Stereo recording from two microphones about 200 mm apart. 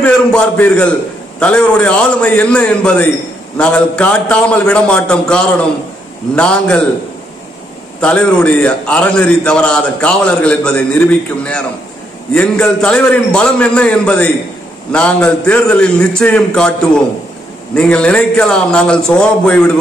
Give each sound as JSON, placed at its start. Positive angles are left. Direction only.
{"t": 0.0, "sound": "a man's voice", "side_deg": 5}
{"t": 8.0, "sound": "a man's voice", "side_deg": 5}